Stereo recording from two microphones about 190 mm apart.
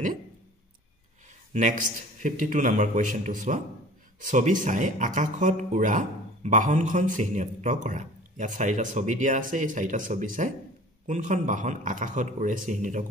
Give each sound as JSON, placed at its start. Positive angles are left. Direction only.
{"t": 1.5, "sound": "a man's voice", "side_deg": -45}